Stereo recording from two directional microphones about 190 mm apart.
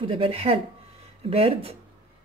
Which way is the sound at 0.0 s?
30° right (ahead or behind).